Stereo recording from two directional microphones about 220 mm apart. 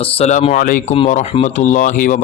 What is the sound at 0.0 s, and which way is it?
Speech, 30° left (ahead or behind).